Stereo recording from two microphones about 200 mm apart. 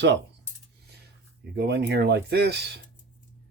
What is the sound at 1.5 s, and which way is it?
Speech, 55° right (ahead or behind).